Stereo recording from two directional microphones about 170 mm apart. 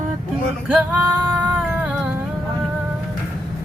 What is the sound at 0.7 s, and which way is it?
Female singing, 10° right (ahead or behind).